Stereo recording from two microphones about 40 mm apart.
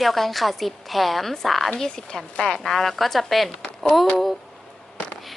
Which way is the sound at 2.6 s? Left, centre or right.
Centre.